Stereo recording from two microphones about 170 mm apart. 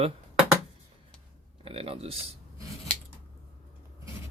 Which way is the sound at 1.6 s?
35° right (ahead or behind).